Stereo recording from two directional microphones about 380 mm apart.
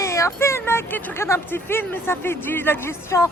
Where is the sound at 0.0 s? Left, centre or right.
Centre.